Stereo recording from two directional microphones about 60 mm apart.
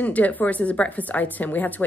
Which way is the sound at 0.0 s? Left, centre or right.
Left.